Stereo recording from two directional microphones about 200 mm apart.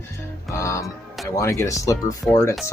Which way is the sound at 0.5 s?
15° left (ahead or behind).